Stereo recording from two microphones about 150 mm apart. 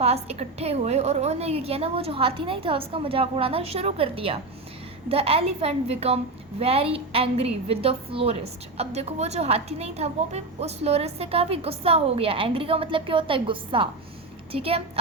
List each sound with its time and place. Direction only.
0.0 s a woman's voice: 45° right (ahead or behind)